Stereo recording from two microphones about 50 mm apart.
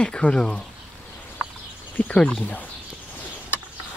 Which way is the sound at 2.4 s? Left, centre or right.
Left.